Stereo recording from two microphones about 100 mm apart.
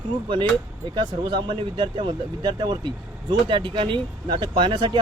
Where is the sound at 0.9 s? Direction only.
50° right (ahead or behind).